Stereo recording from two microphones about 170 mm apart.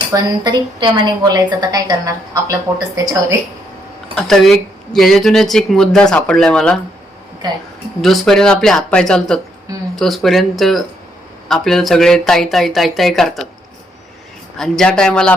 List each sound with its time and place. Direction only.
0.1 s a woman's voice: 20° right (ahead or behind)
4.1 s speech: centre (ahead or behind)
7.4 s a woman's voice: 25° right (ahead or behind)
8.0 s speech: centre (ahead or behind)
14.6 s speech: 5° left (ahead or behind)